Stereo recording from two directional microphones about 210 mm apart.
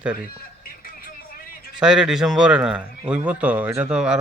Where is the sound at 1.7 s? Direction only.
5° right (ahead or behind).